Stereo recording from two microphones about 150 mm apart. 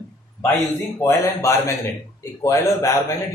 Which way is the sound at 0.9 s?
20° left (ahead or behind).